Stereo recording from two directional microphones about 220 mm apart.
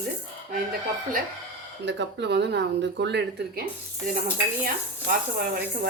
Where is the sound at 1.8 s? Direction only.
50° right (ahead or behind).